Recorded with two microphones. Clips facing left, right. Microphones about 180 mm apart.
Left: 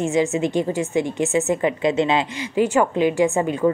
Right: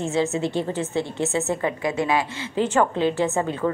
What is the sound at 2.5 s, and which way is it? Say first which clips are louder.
A woman's voice: left 3 dB; 10° left (ahead or behind).